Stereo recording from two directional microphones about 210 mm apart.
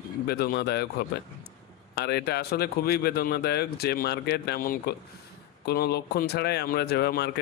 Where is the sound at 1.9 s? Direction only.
50° left (ahead or behind).